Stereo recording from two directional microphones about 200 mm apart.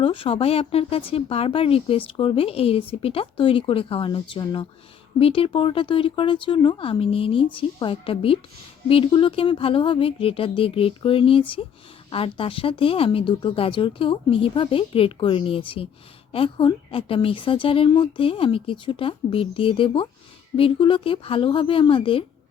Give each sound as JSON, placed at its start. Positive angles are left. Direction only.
{"t": 0.0, "sound": "speech", "side_deg": 25}